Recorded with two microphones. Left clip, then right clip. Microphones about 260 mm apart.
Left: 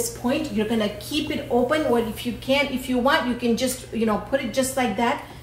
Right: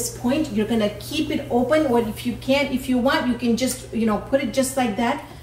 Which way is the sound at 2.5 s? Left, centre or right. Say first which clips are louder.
Right 1 dB; centre.